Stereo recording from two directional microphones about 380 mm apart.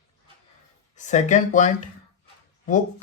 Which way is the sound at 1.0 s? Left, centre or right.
Centre.